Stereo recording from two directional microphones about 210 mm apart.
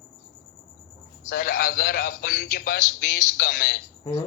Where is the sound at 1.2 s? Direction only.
45° left (ahead or behind).